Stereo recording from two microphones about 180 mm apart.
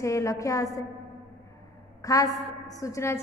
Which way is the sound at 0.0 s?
15° left (ahead or behind).